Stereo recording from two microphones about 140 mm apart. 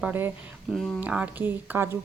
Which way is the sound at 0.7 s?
Centre (ahead or behind).